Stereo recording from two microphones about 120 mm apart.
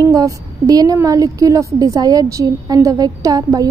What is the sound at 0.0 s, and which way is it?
A woman's voice, 30° right (ahead or behind).